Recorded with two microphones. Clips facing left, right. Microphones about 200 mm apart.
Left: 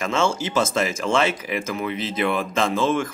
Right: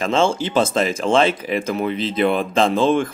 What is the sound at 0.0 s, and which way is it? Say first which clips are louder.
Speech: right 4 dB; 30° right (ahead or behind).